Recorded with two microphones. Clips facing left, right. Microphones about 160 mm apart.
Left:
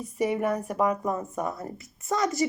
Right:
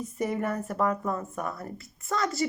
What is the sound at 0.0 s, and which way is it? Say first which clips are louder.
A woman's voice: left 3 dB; 10° left (ahead or behind).